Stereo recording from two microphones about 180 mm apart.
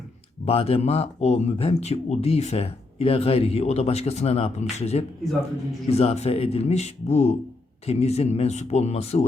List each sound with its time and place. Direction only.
0.4 s speech: 35° left (ahead or behind)